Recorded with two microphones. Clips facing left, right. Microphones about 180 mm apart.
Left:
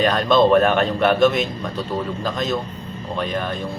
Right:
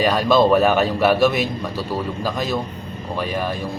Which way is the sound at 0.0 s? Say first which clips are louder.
Even; 5° right (ahead or behind).